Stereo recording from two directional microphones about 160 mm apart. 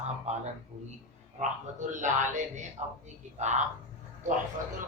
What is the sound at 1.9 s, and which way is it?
Speech, 50° right (ahead or behind).